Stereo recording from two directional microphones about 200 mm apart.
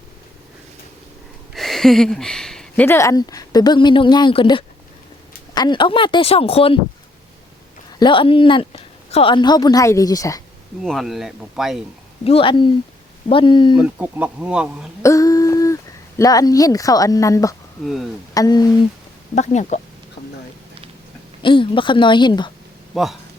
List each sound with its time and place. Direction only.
1.5 s a woman's voice: centre (ahead or behind); by 6.7 s 30° left (ahead or behind)
7.9 s a woman's voice: 25° left (ahead or behind)
10.8 s speech: centre (ahead or behind)
12.2 s a woman's voice: 25° left (ahead or behind)
13.7 s speech: 5° right (ahead or behind)
15.0 s a sound: 15° left (ahead or behind)
17.8 s speech: centre (ahead or behind)
18.3 s a woman's voice: 20° left (ahead or behind)
19.4 s speech: 35° left (ahead or behind)
20.2 s a sound: 30° left (ahead or behind)
21.4 s a woman's voice: 25° left (ahead or behind)
22.9 s speech: centre (ahead or behind)